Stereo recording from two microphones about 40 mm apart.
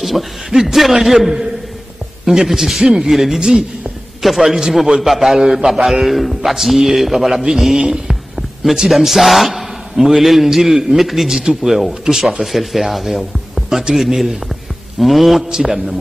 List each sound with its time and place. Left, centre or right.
0.0 s a man's voice: centre
7.8 s heart sounds: centre
8.7 s a man's voice: centre
14.5 s hum: centre
15.4 s speech: centre